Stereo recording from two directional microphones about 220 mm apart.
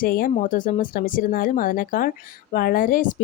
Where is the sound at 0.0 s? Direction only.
40° left (ahead or behind).